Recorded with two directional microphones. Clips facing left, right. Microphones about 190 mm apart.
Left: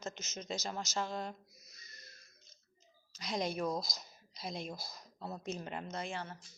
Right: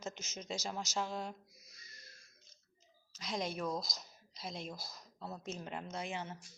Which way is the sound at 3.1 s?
Centre (ahead or behind).